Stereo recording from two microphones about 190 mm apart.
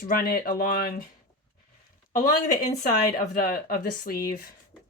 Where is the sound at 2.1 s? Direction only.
40° left (ahead or behind).